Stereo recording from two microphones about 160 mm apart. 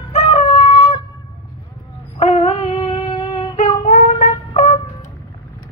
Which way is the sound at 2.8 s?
30° left (ahead or behind).